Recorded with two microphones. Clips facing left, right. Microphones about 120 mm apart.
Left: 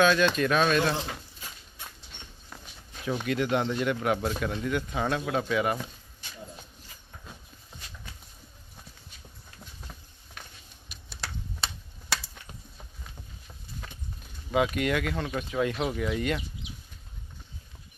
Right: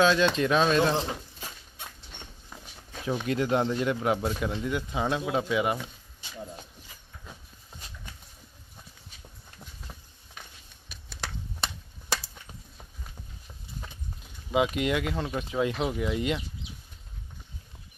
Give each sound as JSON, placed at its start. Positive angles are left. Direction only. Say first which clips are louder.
{"t": 0.0, "sound": "speech", "louder": "even", "side_deg": -25}
{"t": 3.3, "sound": "speech", "louder": "right 1 dB", "side_deg": -30}
{"t": 13.7, "sound": "a sound", "louder": "right 1 dB", "side_deg": -20}
{"t": 15.3, "sound": "speech", "louder": "even", "side_deg": -20}